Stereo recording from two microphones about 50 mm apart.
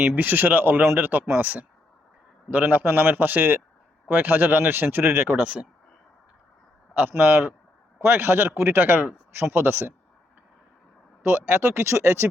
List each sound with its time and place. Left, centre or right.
0.0 s speech: right
5.4 s speech: right
6.9 s speech: right
11.3 s speech: right